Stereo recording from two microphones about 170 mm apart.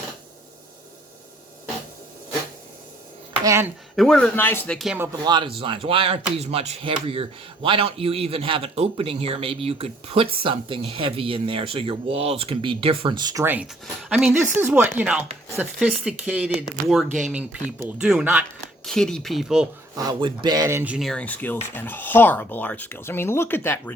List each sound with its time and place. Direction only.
3.4 s speech: 15° right (ahead or behind)
3.9 s speech: centre (ahead or behind)
5.2 s speech: 25° right (ahead or behind)
13.4 s speech: 10° right (ahead or behind)
20.0 s speech: 25° right (ahead or behind); by 23.9 s 10° left (ahead or behind)